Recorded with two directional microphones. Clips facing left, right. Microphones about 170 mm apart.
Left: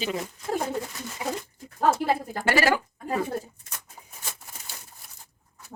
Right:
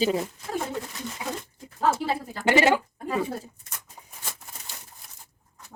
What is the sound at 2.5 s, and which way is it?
Speech, 20° right (ahead or behind).